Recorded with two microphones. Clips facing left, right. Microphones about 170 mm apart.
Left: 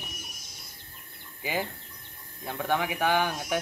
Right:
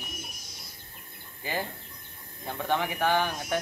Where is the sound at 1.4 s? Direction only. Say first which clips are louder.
Left 2 dB; 5° left (ahead or behind).